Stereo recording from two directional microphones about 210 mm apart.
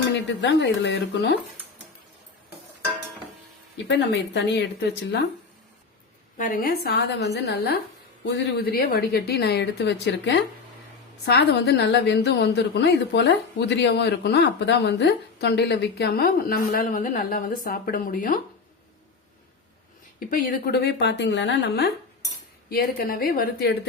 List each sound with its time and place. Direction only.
0.1 s speech: 55° left (ahead or behind)
3.8 s a woman's voice: 50° left (ahead or behind)
6.3 s a woman's voice: 40° left (ahead or behind)
20.1 s a woman's voice: 40° left (ahead or behind)
22.7 s a woman's voice: 45° left (ahead or behind)